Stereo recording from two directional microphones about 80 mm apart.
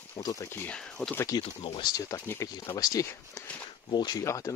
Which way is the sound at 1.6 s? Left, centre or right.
Left.